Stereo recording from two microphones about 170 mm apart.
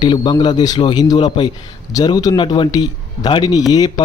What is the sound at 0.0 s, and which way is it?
A man's voice, 25° left (ahead or behind).